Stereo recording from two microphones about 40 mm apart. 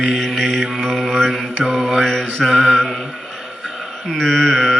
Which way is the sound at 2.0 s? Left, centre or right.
Centre.